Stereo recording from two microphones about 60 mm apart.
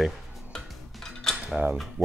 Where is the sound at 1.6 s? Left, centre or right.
Right.